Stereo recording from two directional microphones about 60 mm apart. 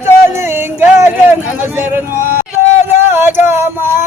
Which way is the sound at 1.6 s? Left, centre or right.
Right.